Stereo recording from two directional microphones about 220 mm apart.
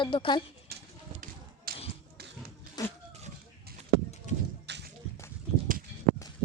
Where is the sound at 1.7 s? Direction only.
40° right (ahead or behind).